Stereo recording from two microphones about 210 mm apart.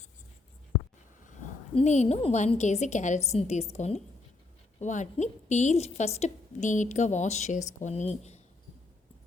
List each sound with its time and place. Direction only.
1.7 s a woman's voice: 35° left (ahead or behind)